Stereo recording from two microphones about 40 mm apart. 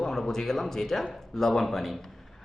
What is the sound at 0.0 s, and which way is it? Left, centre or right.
Speech, centre.